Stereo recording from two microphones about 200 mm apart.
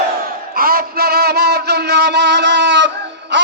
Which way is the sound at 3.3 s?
60° right (ahead or behind).